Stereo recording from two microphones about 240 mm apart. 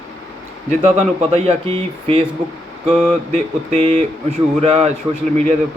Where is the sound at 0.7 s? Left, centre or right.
Right.